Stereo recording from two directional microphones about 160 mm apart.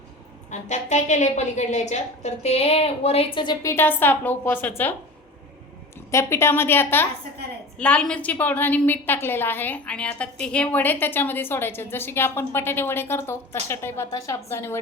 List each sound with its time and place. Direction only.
0.5 s a woman's voice: 45° left (ahead or behind); by 4.9 s 10° left (ahead or behind)
6.1 s a woman's voice: 15° left (ahead or behind)